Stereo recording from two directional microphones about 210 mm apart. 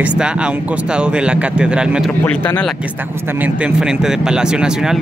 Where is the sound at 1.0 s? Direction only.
5° right (ahead or behind).